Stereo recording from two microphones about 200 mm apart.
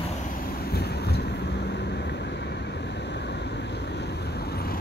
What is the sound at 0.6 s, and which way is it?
Vehicle, 50° left (ahead or behind).